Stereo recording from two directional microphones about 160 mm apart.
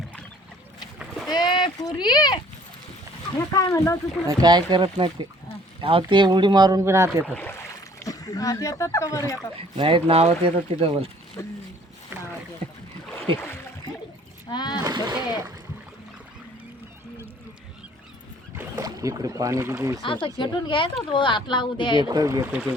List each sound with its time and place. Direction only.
1.3 s a sound: 25° left (ahead or behind)
3.5 s speech: 20° left (ahead or behind)
4.3 s speech: 25° right (ahead or behind)
7.3 s speech: 10° left (ahead or behind)
9.7 s speech: 35° right (ahead or behind)
11.4 s speech: 15° left (ahead or behind)
14.5 s speech: 25° left (ahead or behind)
14.8 s speech: 25° right (ahead or behind)
18.5 s speech: 20° right (ahead or behind)
20.0 s speech: 30° left (ahead or behind)
22.0 s speech: 25° right (ahead or behind)